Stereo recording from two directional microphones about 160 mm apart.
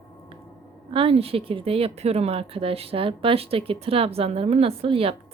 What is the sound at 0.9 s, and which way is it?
Speech, 35° right (ahead or behind).